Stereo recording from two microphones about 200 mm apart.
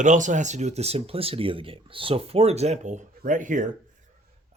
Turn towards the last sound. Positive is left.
turn(degrees=-40)  # may be behind; listen again after turning